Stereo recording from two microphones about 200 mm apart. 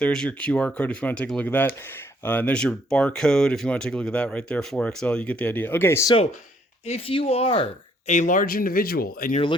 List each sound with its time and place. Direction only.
0.0 s speech: 5° left (ahead or behind)
6.8 s speech: 30° left (ahead or behind); by 9.4 s 45° left (ahead or behind)